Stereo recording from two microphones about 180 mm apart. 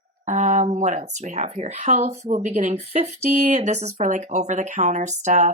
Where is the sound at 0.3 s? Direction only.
40° right (ahead or behind).